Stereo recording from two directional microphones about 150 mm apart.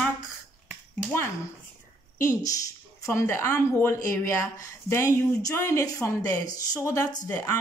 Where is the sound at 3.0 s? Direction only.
20° left (ahead or behind).